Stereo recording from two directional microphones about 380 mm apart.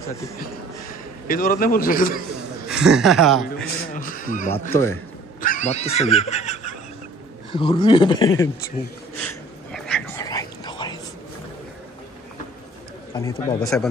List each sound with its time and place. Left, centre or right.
1.2 s a man's voice: left
2.7 s a woman's voice: centre
3.8 s a sound: left
4.5 s speech: centre
5.4 s speech: centre
9.2 s a sound: centre
13.5 s speech: centre